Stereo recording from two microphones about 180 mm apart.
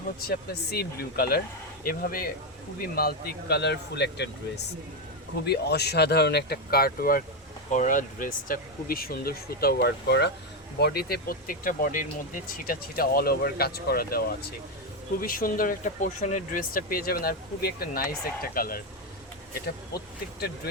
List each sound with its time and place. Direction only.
0.2 s speech: 60° left (ahead or behind)